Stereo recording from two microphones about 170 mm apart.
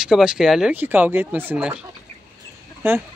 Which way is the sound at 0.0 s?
5° right (ahead or behind).